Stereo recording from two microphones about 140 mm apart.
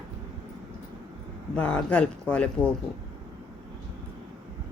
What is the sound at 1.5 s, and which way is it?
Speech, 10° left (ahead or behind).